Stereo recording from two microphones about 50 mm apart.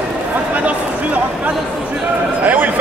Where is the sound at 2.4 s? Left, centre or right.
Right.